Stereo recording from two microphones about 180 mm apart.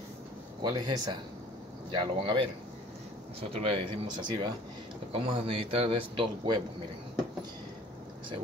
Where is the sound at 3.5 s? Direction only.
30° right (ahead or behind).